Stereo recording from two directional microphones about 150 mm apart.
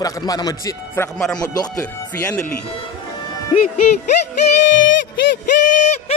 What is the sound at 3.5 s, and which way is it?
Speech, 45° left (ahead or behind).